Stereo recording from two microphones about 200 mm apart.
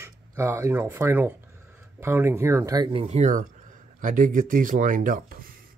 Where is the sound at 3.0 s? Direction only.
35° right (ahead or behind).